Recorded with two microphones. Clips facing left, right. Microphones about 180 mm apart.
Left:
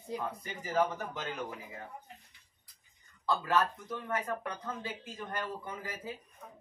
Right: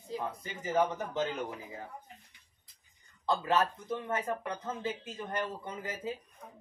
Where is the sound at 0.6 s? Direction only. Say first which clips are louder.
Right 1 dB; 25° right (ahead or behind).